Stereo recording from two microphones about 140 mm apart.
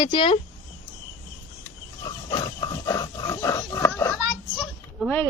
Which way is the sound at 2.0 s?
30° left (ahead or behind).